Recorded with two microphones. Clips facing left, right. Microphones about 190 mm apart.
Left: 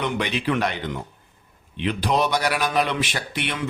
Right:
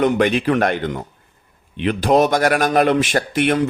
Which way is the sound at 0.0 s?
50° right (ahead or behind).